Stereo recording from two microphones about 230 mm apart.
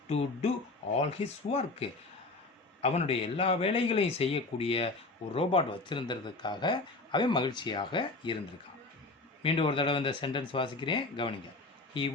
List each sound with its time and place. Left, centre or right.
0.9 s speech: left
9.4 s speech: left